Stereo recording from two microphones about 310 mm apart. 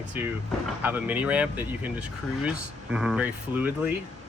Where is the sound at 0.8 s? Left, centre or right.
Centre.